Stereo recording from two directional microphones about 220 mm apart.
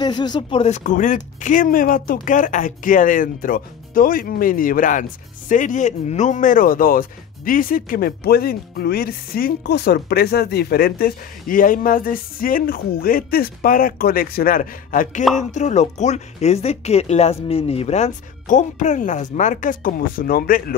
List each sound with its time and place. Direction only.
0.0 s speech: 20° left (ahead or behind); by 20.7 s 40° left (ahead or behind)